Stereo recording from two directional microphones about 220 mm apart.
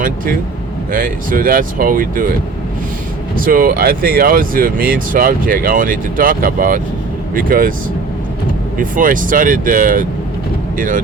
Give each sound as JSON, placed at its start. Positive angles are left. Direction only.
{"t": 0.9, "sound": "speech", "side_deg": -40}
{"t": 3.3, "sound": "speech", "side_deg": -40}
{"t": 8.8, "sound": "speech", "side_deg": -40}